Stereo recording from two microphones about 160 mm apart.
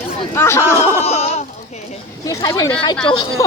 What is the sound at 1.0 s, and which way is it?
Goat, 40° left (ahead or behind).